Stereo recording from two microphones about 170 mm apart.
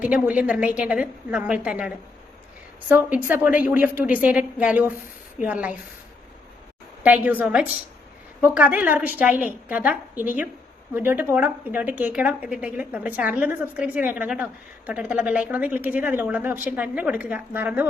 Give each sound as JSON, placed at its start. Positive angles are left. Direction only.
{"t": 0.0, "sound": "a woman's voice", "side_deg": -10}
{"t": 2.9, "sound": "a woman's voice", "side_deg": -10}
{"t": 7.0, "sound": "a woman's voice", "side_deg": -10}